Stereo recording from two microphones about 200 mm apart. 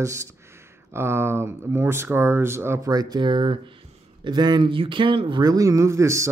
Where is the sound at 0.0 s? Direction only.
15° right (ahead or behind).